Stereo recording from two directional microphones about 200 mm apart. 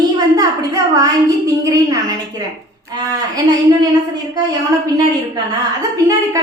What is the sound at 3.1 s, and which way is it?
Speech, 20° right (ahead or behind).